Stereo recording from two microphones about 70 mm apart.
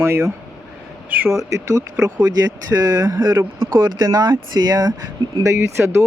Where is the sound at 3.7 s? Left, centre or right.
Right.